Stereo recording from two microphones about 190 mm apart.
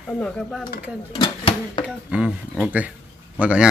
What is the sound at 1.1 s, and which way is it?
Speech, 25° left (ahead or behind).